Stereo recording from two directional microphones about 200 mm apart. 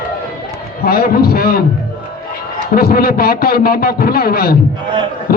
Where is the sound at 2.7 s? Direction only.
50° left (ahead or behind).